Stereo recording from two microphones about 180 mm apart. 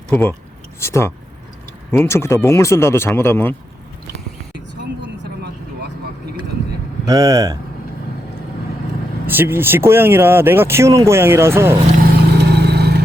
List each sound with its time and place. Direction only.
0.1 s speech: 10° left (ahead or behind)
4.8 s vehicle: 75° right (ahead or behind)
7.1 s speech: 20° right (ahead or behind)
9.2 s speech: 10° right (ahead or behind)
12.0 s vehicle: 65° right (ahead or behind)